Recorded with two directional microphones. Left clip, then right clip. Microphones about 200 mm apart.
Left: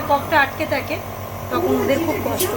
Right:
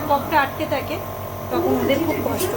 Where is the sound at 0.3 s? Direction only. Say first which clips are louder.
Left 2 dB; centre (ahead or behind).